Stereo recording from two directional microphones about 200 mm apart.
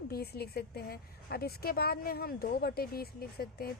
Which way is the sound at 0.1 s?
50° left (ahead or behind).